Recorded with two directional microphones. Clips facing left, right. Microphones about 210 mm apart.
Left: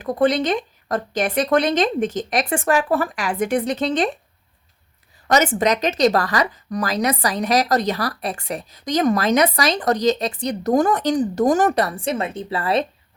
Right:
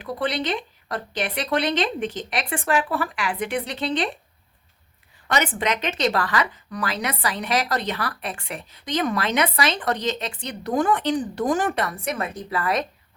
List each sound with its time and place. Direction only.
0.0 s speech: 45° left (ahead or behind)
5.3 s speech: 40° left (ahead or behind)